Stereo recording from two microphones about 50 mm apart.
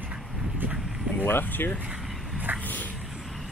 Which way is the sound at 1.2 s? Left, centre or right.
Left.